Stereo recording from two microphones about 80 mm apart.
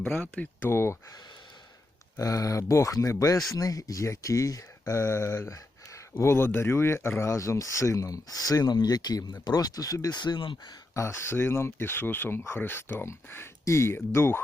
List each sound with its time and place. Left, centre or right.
0.1 s speech: left
2.1 s speech: left
10.2 s speech: left
10.9 s speech: left